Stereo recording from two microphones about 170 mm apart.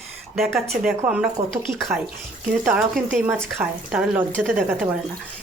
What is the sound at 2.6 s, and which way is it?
Speech, 5° right (ahead or behind).